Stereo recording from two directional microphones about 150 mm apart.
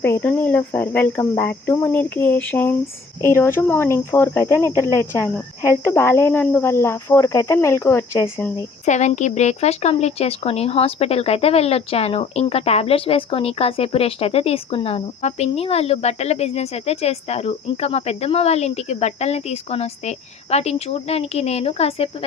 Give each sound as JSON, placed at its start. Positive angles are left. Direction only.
{"t": 0.0, "sound": "speech", "side_deg": 10}
{"t": 8.8, "sound": "speech", "side_deg": 50}